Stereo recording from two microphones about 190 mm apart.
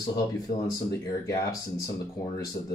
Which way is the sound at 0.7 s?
15° left (ahead or behind).